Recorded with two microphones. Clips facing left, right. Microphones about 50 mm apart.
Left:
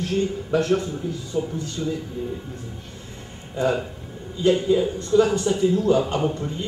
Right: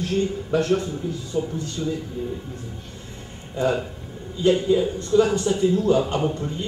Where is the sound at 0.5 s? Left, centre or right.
Centre.